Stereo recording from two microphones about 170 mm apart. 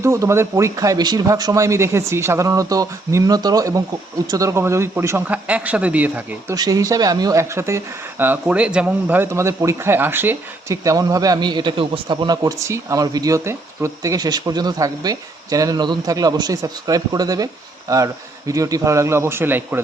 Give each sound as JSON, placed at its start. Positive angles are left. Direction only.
{"t": 0.0, "sound": "a man's voice", "side_deg": -15}
{"t": 6.6, "sound": "speech", "side_deg": -20}